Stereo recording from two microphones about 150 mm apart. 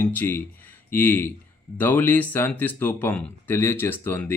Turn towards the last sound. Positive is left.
turn(degrees=10)  # may be behind; listen again after turning